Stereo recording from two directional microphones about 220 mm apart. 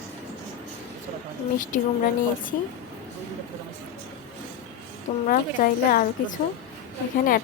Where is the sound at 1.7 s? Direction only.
35° left (ahead or behind).